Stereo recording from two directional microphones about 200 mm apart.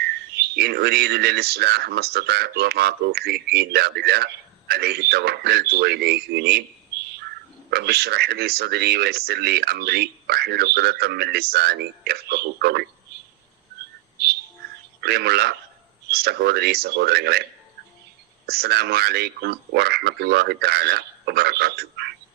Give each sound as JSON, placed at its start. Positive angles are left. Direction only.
{"t": 0.0, "sound": "speech", "side_deg": -55}
{"t": 7.7, "sound": "speech", "side_deg": -50}
{"t": 15.0, "sound": "speech", "side_deg": -55}
{"t": 18.4, "sound": "speech", "side_deg": -50}